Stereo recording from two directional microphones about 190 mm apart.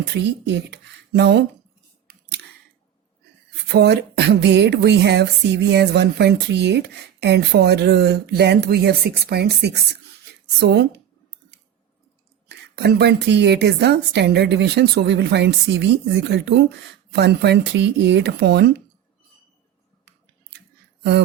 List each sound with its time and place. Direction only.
0.0 s speech: 65° right (ahead or behind)
2.0 s a sound: 60° right (ahead or behind)
3.7 s speech: 60° right (ahead or behind)
12.5 s speech: 60° right (ahead or behind)